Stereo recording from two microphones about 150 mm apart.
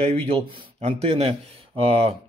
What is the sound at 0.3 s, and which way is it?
Speech, 45° right (ahead or behind).